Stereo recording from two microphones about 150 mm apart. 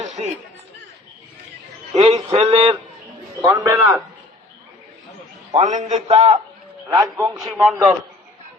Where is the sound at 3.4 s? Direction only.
15° right (ahead or behind).